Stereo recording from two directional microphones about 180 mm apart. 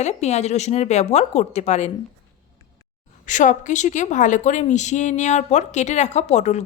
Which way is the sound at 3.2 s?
45° left (ahead or behind).